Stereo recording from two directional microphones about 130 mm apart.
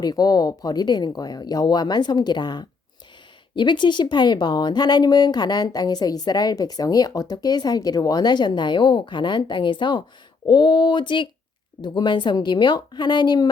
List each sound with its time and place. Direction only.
0.0 s speech: 30° left (ahead or behind)